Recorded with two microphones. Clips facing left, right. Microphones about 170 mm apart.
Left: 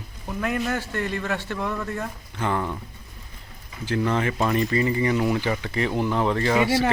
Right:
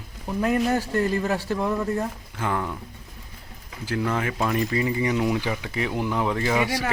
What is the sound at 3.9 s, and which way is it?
Speech, 10° right (ahead or behind).